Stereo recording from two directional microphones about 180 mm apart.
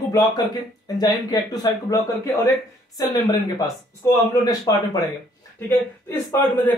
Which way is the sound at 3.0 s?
20° left (ahead or behind).